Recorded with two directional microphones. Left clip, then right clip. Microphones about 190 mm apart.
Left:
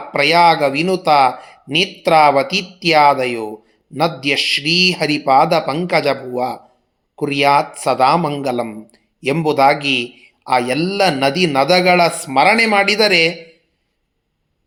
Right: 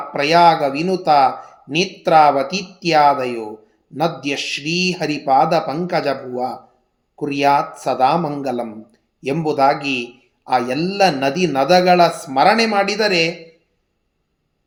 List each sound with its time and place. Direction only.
0.1 s speech: 20° left (ahead or behind)